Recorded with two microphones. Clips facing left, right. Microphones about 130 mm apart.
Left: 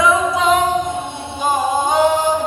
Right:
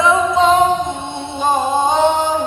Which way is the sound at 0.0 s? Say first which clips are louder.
Right 2 dB; 30° right (ahead or behind).